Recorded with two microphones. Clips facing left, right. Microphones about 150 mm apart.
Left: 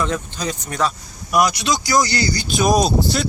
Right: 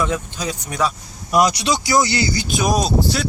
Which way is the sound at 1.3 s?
30° right (ahead or behind).